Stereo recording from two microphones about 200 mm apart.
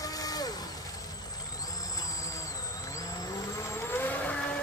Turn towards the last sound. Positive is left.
turn(degrees=5)  # may be behind; listen again after turning